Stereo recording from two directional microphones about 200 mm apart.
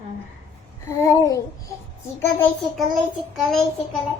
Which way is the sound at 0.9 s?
15° left (ahead or behind).